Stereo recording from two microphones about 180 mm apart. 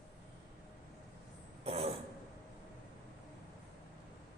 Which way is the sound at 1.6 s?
35° right (ahead or behind).